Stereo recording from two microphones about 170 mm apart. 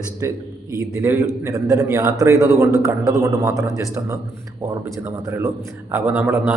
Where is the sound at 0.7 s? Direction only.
20° right (ahead or behind).